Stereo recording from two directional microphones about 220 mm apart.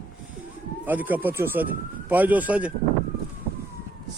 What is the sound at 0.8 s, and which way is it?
Speech, 10° right (ahead or behind).